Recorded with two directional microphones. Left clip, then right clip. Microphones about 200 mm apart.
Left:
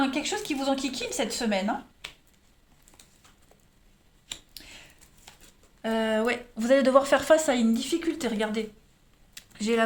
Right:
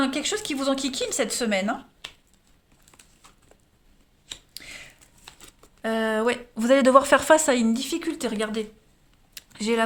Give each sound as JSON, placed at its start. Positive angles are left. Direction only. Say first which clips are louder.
{"t": 0.0, "sound": "speech", "louder": "right 2 dB", "side_deg": -50}
{"t": 2.0, "sound": "finger snapping", "louder": "right 2 dB", "side_deg": -15}
{"t": 4.5, "sound": "a sound", "louder": "right 6 dB", "side_deg": -45}
{"t": 5.8, "sound": "speech", "louder": "right 2 dB", "side_deg": -35}
{"t": 9.3, "sound": "typing", "louder": "right 2 dB", "side_deg": -25}